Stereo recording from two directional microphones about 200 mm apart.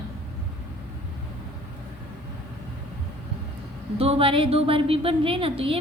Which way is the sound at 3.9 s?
30° right (ahead or behind).